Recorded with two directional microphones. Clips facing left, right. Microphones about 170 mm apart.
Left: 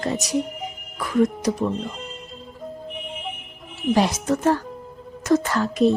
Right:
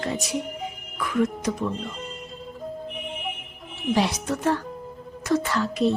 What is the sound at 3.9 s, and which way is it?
Speech, 45° left (ahead or behind).